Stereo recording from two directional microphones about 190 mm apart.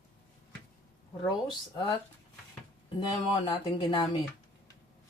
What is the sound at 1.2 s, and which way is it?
Speech, 25° left (ahead or behind).